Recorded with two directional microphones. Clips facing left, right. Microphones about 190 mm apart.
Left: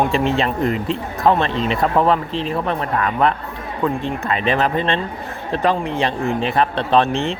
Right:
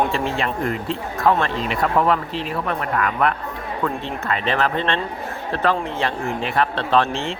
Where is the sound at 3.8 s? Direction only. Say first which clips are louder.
Left 5 dB; 20° left (ahead or behind).